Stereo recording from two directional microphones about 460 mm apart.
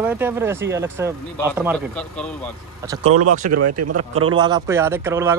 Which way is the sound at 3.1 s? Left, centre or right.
Right.